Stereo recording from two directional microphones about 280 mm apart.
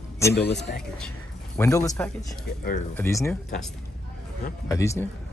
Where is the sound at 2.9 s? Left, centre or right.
Centre.